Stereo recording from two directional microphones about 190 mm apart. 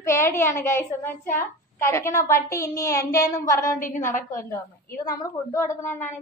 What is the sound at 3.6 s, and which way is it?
Speech, 45° left (ahead or behind).